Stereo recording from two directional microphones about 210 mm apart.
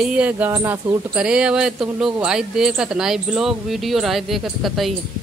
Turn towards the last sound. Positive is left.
turn(degrees=0)  # may be behind; listen again after turning